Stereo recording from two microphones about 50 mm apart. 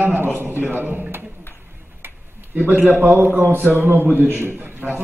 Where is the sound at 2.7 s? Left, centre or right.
Right.